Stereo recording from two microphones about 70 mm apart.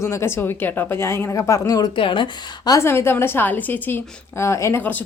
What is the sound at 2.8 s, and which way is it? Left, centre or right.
A woman's voice, left.